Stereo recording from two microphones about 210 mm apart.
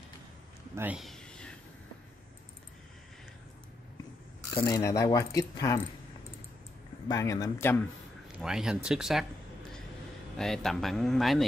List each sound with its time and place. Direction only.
0.7 s a sound: 5° right (ahead or behind)
4.6 s speech: 15° left (ahead or behind)
7.1 s speech: 15° left (ahead or behind)
8.4 s speech: 5° right (ahead or behind)
10.3 s speech: centre (ahead or behind)